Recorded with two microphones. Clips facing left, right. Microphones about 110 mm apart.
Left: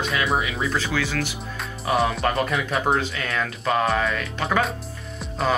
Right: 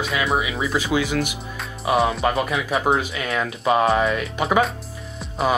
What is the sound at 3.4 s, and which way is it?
Speech, 15° right (ahead or behind).